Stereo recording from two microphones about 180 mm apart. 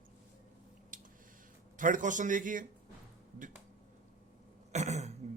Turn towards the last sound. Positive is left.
turn(degrees=-40)  # may be behind; listen again after turning